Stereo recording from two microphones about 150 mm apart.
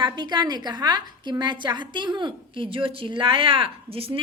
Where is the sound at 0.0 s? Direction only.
30° right (ahead or behind).